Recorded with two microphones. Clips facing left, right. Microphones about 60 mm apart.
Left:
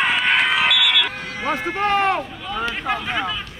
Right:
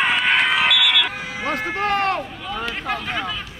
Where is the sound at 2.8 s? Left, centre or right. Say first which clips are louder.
Left 2 dB; centre.